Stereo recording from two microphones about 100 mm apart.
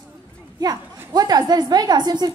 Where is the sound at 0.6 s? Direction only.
40° right (ahead or behind).